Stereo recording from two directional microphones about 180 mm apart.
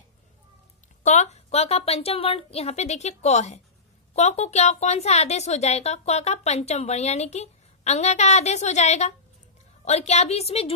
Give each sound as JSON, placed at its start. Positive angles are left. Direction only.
{"t": 1.0, "sound": "speech", "side_deg": 40}